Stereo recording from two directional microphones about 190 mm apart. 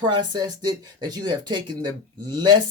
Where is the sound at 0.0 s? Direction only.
25° right (ahead or behind).